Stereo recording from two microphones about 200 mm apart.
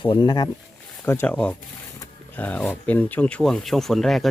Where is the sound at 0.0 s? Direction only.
20° left (ahead or behind).